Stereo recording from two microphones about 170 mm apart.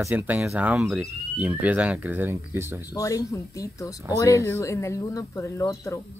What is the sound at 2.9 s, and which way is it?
Speech, 20° left (ahead or behind).